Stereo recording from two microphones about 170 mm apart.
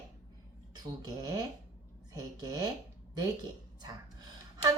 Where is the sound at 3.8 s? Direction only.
25° right (ahead or behind).